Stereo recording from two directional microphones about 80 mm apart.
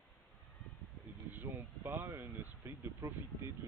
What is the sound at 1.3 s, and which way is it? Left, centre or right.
Speech, right.